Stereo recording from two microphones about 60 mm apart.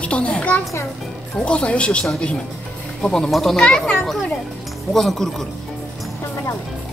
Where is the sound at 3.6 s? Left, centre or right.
Centre.